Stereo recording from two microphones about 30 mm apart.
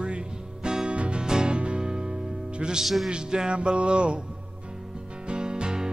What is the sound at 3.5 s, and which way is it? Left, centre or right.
Music, right.